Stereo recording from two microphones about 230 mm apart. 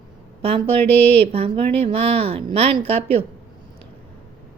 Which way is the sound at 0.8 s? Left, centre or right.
Right.